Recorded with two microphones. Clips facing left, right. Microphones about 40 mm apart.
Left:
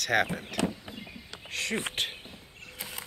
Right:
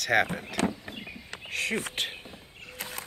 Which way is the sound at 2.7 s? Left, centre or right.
Right.